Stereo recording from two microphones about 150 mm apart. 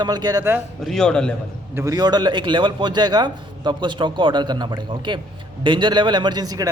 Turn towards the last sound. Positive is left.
turn(degrees=-25)  # may be behind; listen again after turning